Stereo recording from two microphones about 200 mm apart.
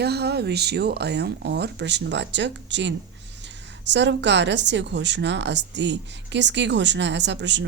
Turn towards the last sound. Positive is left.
turn(degrees=-60)  # may be behind; listen again after turning